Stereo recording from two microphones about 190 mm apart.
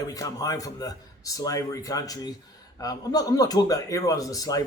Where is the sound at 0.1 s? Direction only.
20° left (ahead or behind).